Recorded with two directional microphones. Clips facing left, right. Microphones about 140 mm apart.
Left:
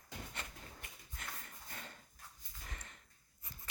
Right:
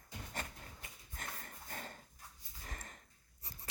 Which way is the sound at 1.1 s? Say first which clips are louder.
Right 2 dB; 45° right (ahead or behind).